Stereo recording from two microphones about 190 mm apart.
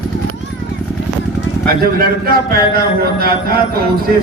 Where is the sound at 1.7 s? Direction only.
50° right (ahead or behind).